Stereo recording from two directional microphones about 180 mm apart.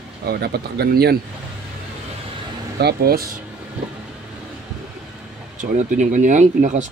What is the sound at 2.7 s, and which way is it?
Speech, 60° right (ahead or behind).